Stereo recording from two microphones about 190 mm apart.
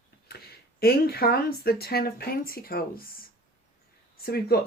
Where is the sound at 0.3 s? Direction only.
55° left (ahead or behind).